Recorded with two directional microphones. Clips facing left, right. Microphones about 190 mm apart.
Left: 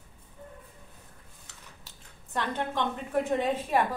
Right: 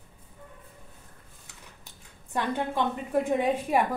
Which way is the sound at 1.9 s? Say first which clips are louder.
Right 4 dB; 10° right (ahead or behind).